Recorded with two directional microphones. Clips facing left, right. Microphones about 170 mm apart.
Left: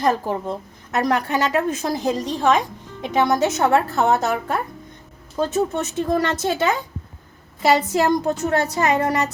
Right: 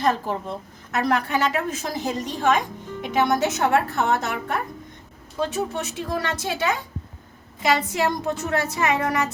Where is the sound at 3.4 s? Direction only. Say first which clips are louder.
Left 3 dB; 35° left (ahead or behind).